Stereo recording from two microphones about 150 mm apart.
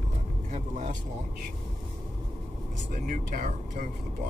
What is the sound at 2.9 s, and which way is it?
Speech, 60° right (ahead or behind).